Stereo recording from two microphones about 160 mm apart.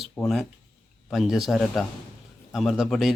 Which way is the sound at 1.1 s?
Centre (ahead or behind).